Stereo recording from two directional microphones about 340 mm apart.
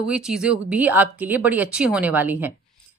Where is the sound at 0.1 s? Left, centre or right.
Centre.